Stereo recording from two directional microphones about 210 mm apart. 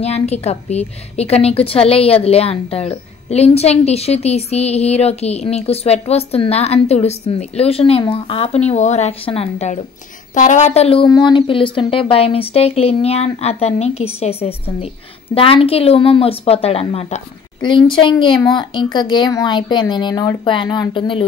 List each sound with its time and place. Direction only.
0.0 s a woman's voice: 30° left (ahead or behind)